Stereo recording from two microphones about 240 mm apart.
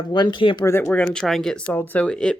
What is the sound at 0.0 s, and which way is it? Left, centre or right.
Speech, centre.